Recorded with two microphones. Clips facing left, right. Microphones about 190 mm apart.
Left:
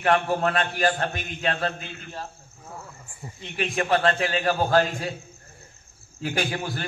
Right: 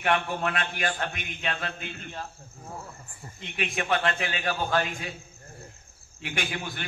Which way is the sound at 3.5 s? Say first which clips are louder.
Left 4 dB; 35° left (ahead or behind).